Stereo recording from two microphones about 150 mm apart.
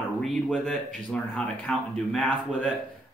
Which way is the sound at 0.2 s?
Centre (ahead or behind).